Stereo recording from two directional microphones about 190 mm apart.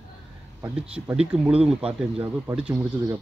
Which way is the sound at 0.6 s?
10° right (ahead or behind).